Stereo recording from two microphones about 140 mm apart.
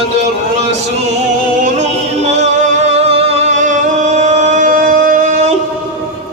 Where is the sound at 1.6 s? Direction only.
55° right (ahead or behind).